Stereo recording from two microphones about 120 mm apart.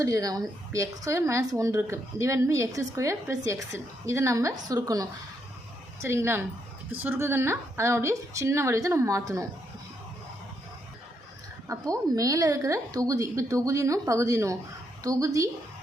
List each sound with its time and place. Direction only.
0.0 s a woman's voice: 30° right (ahead or behind)
11.7 s a woman's voice: 30° right (ahead or behind)